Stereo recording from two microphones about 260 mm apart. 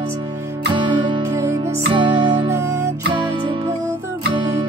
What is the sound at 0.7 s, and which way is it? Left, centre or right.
Music, centre.